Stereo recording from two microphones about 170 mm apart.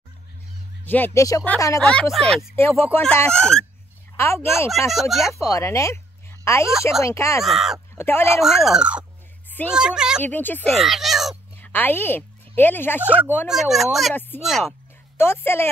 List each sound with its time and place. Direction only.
0.8 s speech: 10° left (ahead or behind)
2.5 s speech: 15° left (ahead or behind)
4.2 s speech: 15° left (ahead or behind)
4.6 s speech: centre (ahead or behind)
5.3 s speech: 20° left (ahead or behind)
7.4 s speech: centre (ahead or behind)
7.9 s speech: 15° left (ahead or behind)
8.4 s speech: centre (ahead or behind)
10.2 s speech: 10° left (ahead or behind)
10.7 s crow: centre (ahead or behind)
11.5 s speech: 10° left (ahead or behind)
13.5 s speech: centre (ahead or behind)
15.1 s speech: 15° left (ahead or behind)